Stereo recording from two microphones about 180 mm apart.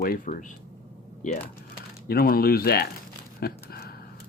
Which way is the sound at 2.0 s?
55° left (ahead or behind).